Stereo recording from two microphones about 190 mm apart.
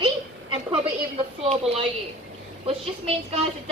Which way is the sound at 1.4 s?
35° right (ahead or behind).